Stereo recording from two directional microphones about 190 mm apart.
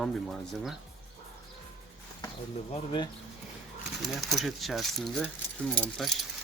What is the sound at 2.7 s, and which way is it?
Speech, 25° left (ahead or behind).